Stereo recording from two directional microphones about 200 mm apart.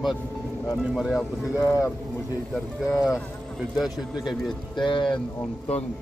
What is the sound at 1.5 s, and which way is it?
Speech, 15° left (ahead or behind).